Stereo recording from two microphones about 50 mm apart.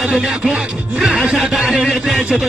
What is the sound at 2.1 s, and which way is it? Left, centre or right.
Speech, right.